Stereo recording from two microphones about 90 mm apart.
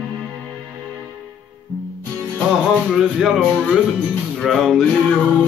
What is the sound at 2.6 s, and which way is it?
Music, 5° right (ahead or behind).